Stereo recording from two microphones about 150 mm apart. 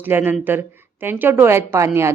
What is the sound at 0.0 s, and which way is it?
Speech, 15° right (ahead or behind).